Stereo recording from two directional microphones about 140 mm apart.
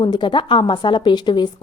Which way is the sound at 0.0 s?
35° left (ahead or behind).